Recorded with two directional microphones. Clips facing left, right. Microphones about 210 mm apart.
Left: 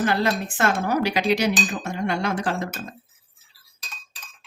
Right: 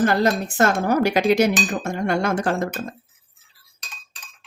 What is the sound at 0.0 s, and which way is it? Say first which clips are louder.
Speech: right 4 dB; 45° right (ahead or behind).